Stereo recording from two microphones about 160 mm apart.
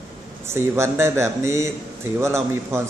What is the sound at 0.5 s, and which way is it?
A man's voice, 15° right (ahead or behind).